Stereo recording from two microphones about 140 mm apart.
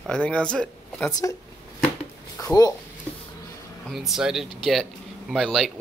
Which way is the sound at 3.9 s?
Centre (ahead or behind).